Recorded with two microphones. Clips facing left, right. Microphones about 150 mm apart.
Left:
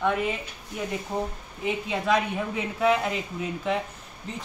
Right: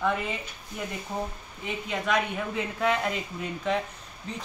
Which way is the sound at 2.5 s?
5° left (ahead or behind).